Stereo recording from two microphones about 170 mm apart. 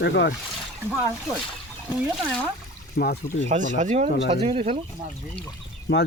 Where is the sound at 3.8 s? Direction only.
45° right (ahead or behind).